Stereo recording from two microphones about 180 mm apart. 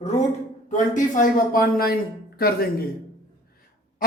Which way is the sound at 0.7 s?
45° left (ahead or behind).